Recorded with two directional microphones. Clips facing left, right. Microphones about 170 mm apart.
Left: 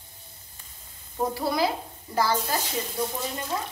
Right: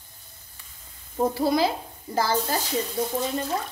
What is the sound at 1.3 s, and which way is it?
Speech, 25° right (ahead or behind).